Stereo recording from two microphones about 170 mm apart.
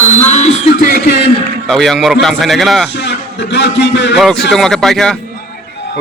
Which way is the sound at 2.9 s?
85° left.